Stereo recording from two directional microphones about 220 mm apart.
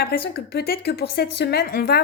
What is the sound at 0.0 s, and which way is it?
Speech, 45° left (ahead or behind).